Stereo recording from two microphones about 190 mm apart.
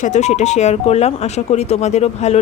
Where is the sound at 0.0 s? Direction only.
40° left (ahead or behind).